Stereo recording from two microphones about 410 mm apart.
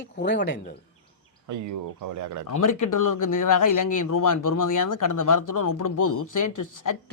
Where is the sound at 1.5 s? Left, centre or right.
Right.